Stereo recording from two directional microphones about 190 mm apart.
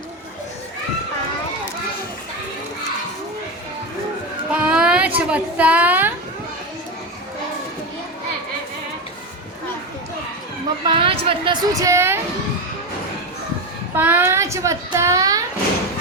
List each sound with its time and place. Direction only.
4.5 s a child's voice: 5° right (ahead or behind)
10.8 s a woman's voice: 30° right (ahead or behind)
13.9 s a woman's voice: 10° right (ahead or behind)